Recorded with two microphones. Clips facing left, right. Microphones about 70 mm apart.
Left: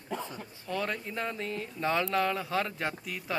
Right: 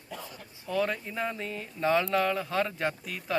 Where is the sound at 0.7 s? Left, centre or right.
Centre.